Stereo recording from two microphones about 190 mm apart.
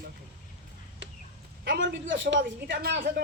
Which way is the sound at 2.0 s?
75° right (ahead or behind).